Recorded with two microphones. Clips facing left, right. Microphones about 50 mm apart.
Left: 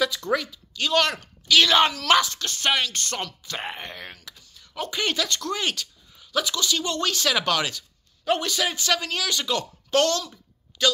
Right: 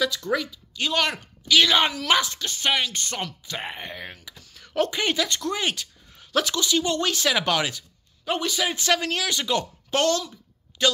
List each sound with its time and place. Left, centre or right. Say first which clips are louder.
0.0 s speech: left 1 dB; centre
0.7 s speech: left 2 dB; centre
3.4 s speech: even; centre
4.4 s a sound: right 4 dB; right
4.9 s speech: right 1 dB; centre
6.1 s a sound: right 2 dB; right
6.5 s speech: right 3 dB; right
8.3 s speech: left 1 dB; centre
8.7 s speech: right 2 dB; right